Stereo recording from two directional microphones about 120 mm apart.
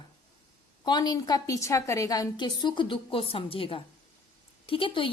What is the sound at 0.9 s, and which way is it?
A woman's voice, 35° left (ahead or behind).